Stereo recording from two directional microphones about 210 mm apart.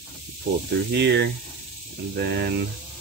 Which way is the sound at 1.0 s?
55° right (ahead or behind).